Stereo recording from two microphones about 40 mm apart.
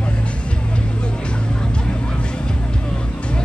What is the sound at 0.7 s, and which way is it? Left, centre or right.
Vehicle, left.